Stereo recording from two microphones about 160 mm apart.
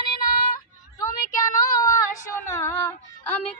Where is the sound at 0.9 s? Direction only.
25° left (ahead or behind).